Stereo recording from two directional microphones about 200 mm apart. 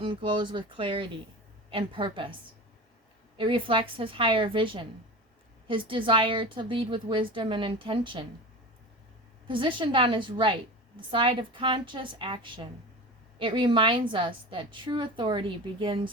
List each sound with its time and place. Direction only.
0.0 s a woman's voice: 25° right (ahead or behind)
3.3 s a woman's voice: 25° right (ahead or behind)
9.5 s a woman's voice: 25° right (ahead or behind)